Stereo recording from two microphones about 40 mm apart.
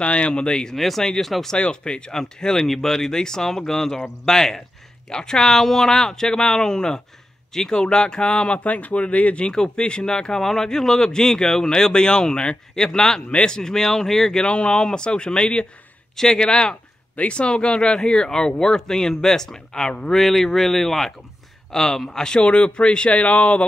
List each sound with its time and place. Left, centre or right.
0.0 s speech: left
0.7 s speech: centre
1.0 s speech: centre
8.5 s speech: left; by 14.5 s centre
14.5 s speech: left
22.4 s speech: left